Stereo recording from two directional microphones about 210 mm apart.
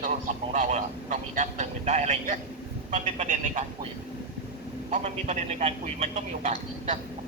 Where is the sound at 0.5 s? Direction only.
35° right (ahead or behind).